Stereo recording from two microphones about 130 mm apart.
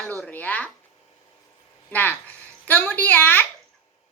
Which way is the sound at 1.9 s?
15° left (ahead or behind).